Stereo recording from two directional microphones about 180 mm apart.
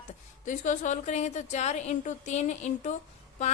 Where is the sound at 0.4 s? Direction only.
45° left (ahead or behind).